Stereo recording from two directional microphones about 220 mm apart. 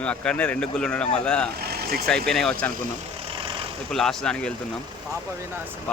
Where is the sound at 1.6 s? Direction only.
45° right (ahead or behind).